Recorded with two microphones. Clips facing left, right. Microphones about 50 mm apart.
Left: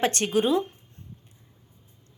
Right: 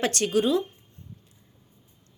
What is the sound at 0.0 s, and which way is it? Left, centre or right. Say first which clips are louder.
Speech: even; left.